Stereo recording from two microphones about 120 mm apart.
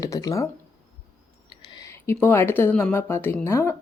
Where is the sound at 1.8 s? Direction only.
20° left (ahead or behind).